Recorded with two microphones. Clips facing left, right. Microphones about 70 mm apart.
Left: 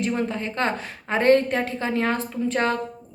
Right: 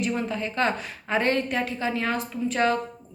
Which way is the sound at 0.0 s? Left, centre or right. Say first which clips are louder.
Left 2 dB; left.